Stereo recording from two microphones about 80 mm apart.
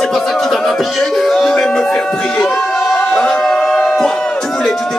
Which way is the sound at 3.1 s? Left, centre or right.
Centre.